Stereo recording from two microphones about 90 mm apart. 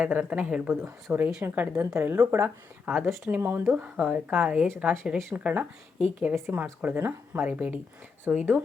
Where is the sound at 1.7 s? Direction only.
35° right (ahead or behind).